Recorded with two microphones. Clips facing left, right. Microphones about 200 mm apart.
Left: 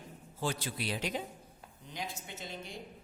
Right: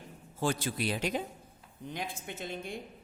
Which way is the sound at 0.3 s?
50° right (ahead or behind).